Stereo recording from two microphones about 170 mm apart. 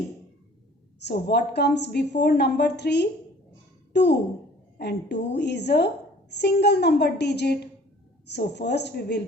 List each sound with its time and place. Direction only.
0.9 s a woman's voice: 75° left (ahead or behind)